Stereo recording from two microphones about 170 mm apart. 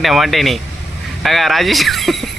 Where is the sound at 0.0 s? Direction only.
Centre (ahead or behind).